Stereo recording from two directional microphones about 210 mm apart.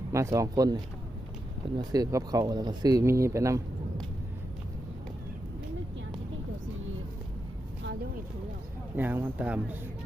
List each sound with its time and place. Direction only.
0.1 s speech: 15° right (ahead or behind)
9.0 s speech: 10° right (ahead or behind)